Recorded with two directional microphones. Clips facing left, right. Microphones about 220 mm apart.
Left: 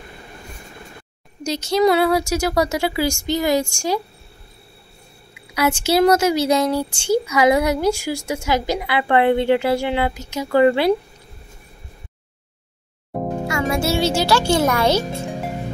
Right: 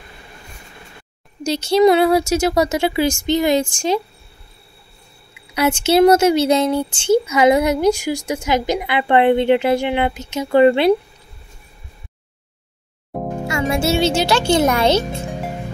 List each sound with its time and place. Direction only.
1.4 s speech: 30° right (ahead or behind)
5.5 s speech: 25° right (ahead or behind)
13.1 s music: centre (ahead or behind)
13.5 s music: 25° right (ahead or behind)
15.0 s a child's voice: centre (ahead or behind)